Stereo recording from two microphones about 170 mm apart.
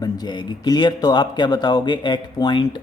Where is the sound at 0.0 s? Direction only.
25° left (ahead or behind).